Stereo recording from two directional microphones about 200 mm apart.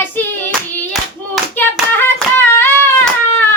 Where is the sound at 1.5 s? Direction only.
10° left (ahead or behind).